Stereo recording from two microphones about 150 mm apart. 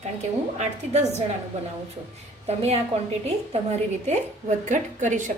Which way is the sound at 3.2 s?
45° right (ahead or behind).